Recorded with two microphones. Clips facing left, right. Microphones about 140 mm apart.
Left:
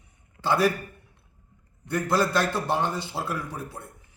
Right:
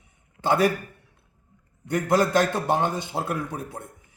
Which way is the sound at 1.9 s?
15° right (ahead or behind).